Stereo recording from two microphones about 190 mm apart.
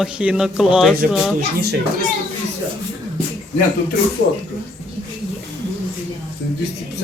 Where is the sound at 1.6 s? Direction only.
55° right (ahead or behind).